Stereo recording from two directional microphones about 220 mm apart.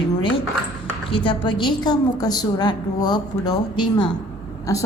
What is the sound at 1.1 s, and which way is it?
A woman's voice, 20° left (ahead or behind).